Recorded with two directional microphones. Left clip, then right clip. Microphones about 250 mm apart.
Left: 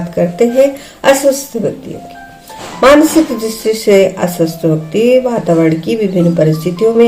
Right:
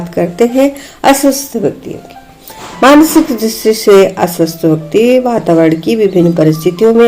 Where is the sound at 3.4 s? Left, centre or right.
Right.